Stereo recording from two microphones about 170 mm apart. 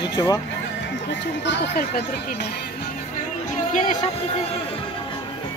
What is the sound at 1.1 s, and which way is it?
Speech, 85° left.